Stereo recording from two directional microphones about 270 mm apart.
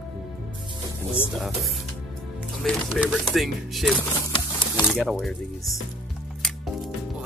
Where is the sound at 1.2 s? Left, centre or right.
Centre.